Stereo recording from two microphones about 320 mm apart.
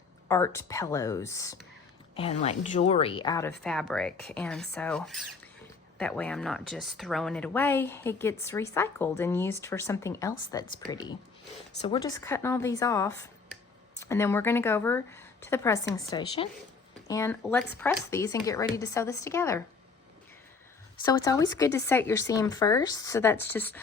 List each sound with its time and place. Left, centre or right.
0.3 s speech: centre
21.0 s speech: centre